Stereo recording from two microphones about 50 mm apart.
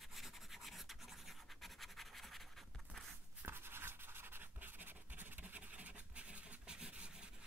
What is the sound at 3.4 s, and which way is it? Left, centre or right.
Writing, right.